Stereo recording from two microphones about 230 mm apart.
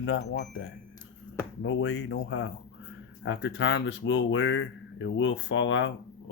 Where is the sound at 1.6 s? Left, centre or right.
Left.